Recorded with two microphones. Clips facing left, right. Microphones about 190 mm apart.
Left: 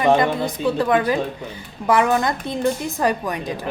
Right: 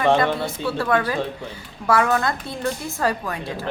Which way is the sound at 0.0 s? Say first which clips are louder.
Left 2 dB; 15° left (ahead or behind).